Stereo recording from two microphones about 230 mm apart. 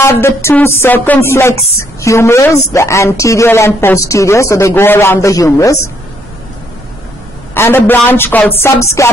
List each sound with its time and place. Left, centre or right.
0.0 s music: centre
7.5 s music: centre